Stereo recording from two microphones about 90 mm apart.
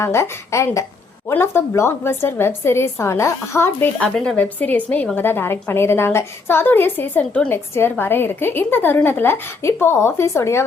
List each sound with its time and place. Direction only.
0.0 s a woman's voice: 30° left (ahead or behind)
4.0 s a woman's voice: 10° left (ahead or behind); by 10.7 s 30° left (ahead or behind)